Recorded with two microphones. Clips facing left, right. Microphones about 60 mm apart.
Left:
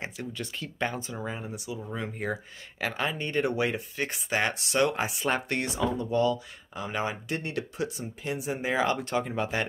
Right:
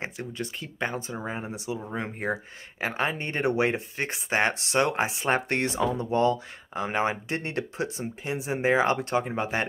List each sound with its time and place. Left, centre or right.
0.0 s speech: right